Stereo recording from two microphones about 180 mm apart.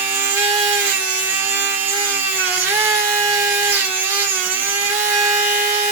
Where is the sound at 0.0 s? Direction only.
10° right (ahead or behind).